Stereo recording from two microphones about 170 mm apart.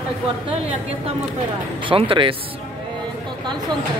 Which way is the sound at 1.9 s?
30° right (ahead or behind).